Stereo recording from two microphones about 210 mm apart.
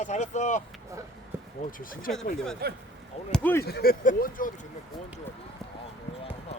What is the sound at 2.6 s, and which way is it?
Speech, 50° right (ahead or behind).